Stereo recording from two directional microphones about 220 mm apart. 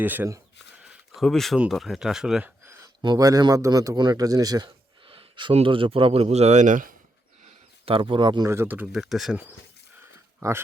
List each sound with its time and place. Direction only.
0.0 s speech: 10° right (ahead or behind)
1.1 s speech: centre (ahead or behind); by 6.9 s 35° right (ahead or behind)
7.4 s speech: 25° right (ahead or behind); by 9.6 s 5° right (ahead or behind)